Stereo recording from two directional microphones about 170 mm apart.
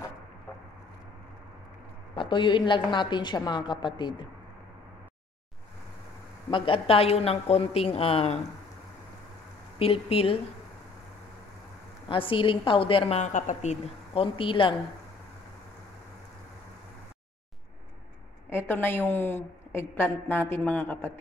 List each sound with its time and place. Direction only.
2.1 s a woman's voice: 30° left (ahead or behind)
6.5 s a woman's voice: 30° left (ahead or behind)
9.8 s a woman's voice: 35° left (ahead or behind)
12.1 s a woman's voice: 30° left (ahead or behind)
13.2 s a woman's voice: 50° left (ahead or behind); by 14.7 s 30° left (ahead or behind)
18.5 s a woman's voice: 15° left (ahead or behind)